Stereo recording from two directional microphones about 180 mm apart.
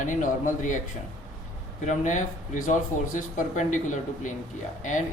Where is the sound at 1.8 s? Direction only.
45° left (ahead or behind).